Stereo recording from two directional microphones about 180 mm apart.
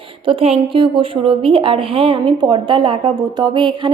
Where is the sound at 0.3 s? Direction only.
30° right (ahead or behind).